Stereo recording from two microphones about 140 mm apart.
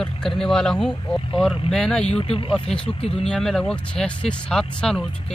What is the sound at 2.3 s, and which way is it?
Speech, 40° left (ahead or behind).